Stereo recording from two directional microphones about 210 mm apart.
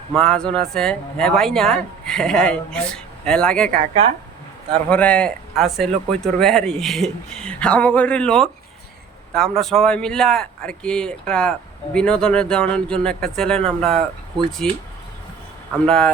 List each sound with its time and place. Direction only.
0.2 s speech: 5° left (ahead or behind)
3.7 s a woman's voice: 30° right (ahead or behind)
4.9 s speech: 5° left (ahead or behind)
15.9 s speech: 5° left (ahead or behind)